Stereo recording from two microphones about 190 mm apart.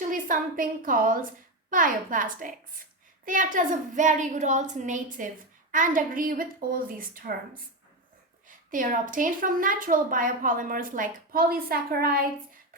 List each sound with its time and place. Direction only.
0.0 s a woman's voice: 45° right (ahead or behind)
8.4 s a woman's voice: 45° right (ahead or behind)